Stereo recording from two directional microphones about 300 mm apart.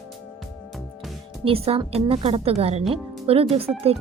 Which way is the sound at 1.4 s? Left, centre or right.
Centre.